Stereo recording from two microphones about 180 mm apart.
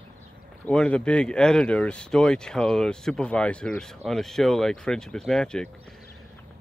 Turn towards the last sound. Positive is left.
turn(degrees=5)  # may be behind; listen again after turning